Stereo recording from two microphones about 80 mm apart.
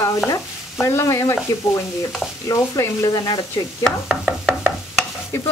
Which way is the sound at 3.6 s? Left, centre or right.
Left.